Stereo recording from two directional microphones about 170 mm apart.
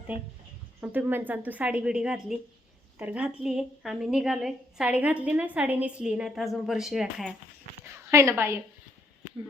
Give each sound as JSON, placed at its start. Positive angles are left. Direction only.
{"t": 0.8, "sound": "a woman's voice", "side_deg": -10}
{"t": 7.9, "sound": "a woman's voice", "side_deg": -15}